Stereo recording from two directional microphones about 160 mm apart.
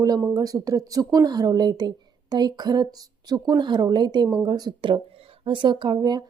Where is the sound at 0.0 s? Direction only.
20° right (ahead or behind).